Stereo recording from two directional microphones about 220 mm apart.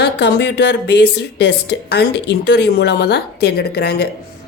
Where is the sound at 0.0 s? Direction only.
50° left (ahead or behind).